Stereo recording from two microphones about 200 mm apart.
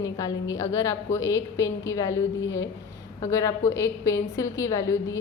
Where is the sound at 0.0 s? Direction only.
15° left (ahead or behind).